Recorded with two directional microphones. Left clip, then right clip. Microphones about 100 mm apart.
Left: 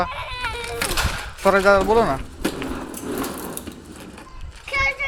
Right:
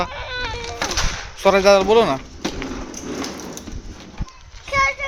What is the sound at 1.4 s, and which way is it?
Speech, 60° right (ahead or behind).